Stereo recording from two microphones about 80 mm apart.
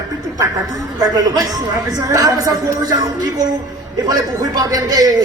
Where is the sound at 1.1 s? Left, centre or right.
Right.